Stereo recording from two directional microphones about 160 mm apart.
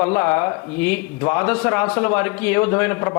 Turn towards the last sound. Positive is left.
turn(degrees=10)  # may be behind; listen again after turning